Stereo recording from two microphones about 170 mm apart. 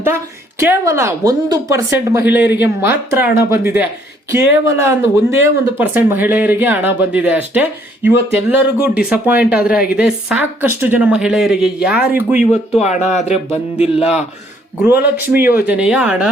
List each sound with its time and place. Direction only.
0.6 s speech: 15° right (ahead or behind)
12.5 s speech: 40° left (ahead or behind)
14.8 s speech: 10° right (ahead or behind)